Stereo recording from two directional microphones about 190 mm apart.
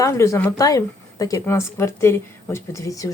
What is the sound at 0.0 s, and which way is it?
A woman's voice, 15° left (ahead or behind).